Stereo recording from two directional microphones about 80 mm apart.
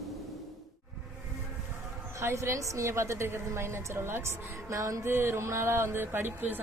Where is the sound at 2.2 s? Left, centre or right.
Right.